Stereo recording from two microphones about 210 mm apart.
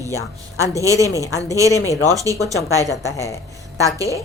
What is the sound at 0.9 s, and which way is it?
Speech, 15° left (ahead or behind).